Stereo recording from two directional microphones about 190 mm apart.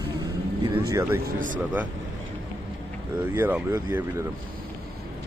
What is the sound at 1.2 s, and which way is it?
Speech, 45° right (ahead or behind).